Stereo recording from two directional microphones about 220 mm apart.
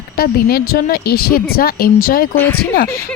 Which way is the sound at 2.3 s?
10° left (ahead or behind).